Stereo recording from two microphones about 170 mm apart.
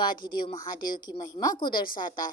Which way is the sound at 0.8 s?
55° left (ahead or behind).